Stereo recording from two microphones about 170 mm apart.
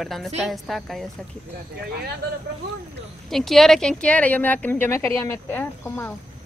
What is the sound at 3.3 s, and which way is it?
A woman's voice, centre (ahead or behind).